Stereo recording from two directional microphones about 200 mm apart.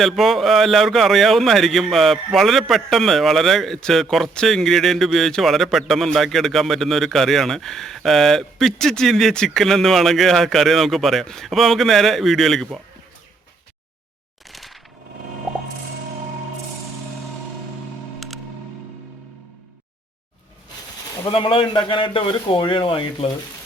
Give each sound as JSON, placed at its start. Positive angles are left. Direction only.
{"t": 0.0, "sound": "speech", "side_deg": 0}
{"t": 14.5, "sound": "a sound", "side_deg": 0}
{"t": 21.2, "sound": "a man's voice", "side_deg": 25}